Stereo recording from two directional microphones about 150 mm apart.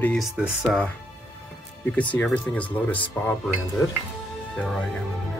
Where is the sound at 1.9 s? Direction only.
10° left (ahead or behind).